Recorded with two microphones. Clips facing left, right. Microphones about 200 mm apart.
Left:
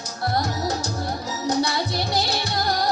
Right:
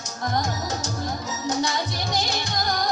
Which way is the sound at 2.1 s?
35° left (ahead or behind).